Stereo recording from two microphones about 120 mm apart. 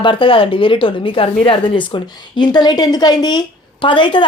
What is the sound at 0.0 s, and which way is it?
A woman's voice, 45° left (ahead or behind).